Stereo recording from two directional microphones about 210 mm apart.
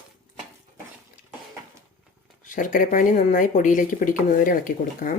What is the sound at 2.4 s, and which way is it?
Speech, 40° left (ahead or behind).